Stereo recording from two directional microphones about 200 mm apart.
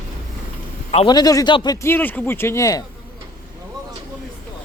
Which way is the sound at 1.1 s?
20° left (ahead or behind).